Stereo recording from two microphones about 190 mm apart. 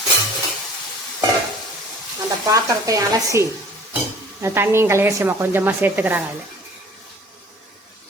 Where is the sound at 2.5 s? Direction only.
15° right (ahead or behind).